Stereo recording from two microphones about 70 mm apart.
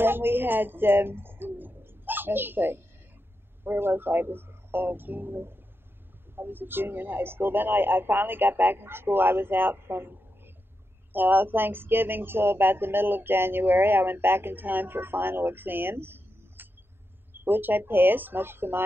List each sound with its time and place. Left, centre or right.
0.0 s speech: right